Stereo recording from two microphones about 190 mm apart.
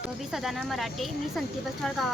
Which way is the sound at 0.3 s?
Centre (ahead or behind).